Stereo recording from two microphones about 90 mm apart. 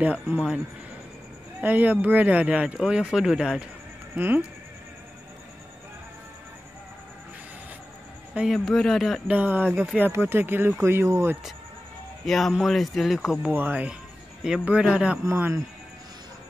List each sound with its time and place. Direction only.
0.0 s speech: 20° right (ahead or behind)
1.6 s speech: 20° right (ahead or behind)
4.2 s speech: 20° right (ahead or behind)
8.6 s speech: 5° left (ahead or behind)
9.3 s speech: 20° right (ahead or behind)
12.3 s speech: centre (ahead or behind)
13.5 s speech: 20° right (ahead or behind)
15.2 s speech: 20° right (ahead or behind)